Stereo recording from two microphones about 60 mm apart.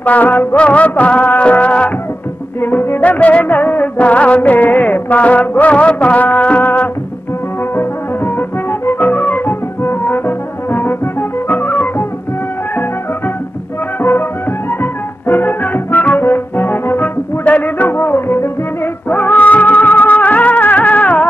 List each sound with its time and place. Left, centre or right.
0.0 s music: left
2.6 s music: left
3.0 s music: left
8.4 s flute: left
14.8 s music: left